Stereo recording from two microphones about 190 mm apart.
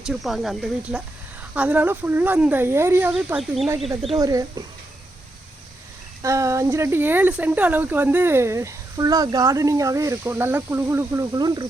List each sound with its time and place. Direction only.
0.0 s speech: centre (ahead or behind)
4.2 s speech: 20° right (ahead or behind)
6.2 s speech: 15° right (ahead or behind)